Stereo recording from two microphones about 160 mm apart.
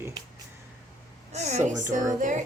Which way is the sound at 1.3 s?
45° right (ahead or behind).